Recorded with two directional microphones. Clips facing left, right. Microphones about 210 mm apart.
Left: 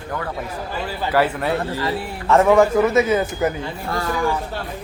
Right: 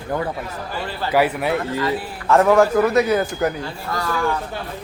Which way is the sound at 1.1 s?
10° right (ahead or behind).